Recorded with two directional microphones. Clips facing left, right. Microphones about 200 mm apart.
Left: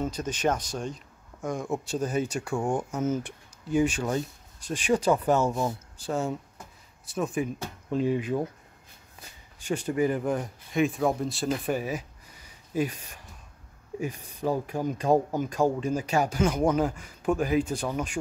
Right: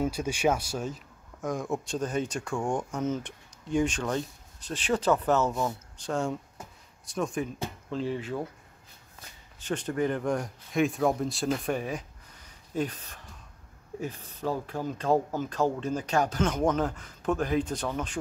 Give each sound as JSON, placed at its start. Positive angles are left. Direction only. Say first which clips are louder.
{"t": 0.0, "sound": "speech", "louder": "right 1 dB", "side_deg": -10}
{"t": 9.6, "sound": "speech", "louder": "left 3 dB", "side_deg": 10}